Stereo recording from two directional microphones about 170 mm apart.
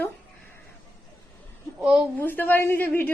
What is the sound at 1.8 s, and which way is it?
Speech, 5° right (ahead or behind).